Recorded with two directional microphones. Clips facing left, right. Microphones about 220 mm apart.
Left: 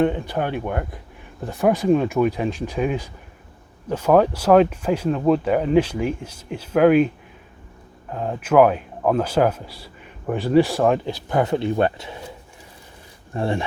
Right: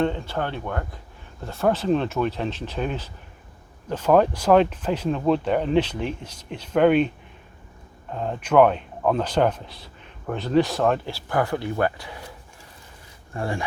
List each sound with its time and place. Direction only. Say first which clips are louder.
0.0 s speech: left 4 dB; 15° left (ahead or behind)
8.1 s speech: left 2 dB; 5° left (ahead or behind); by 12.2 s 25° left (ahead or behind)
13.3 s speech: left 5 dB; 25° left (ahead or behind)